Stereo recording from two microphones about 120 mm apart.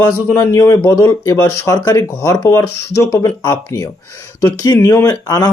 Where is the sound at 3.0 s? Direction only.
20° left (ahead or behind).